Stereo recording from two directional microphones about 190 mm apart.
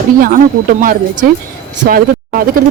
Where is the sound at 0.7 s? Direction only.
45° right (ahead or behind).